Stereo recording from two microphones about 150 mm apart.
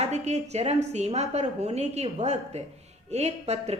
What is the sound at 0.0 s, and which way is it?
A woman's voice, 45° right (ahead or behind).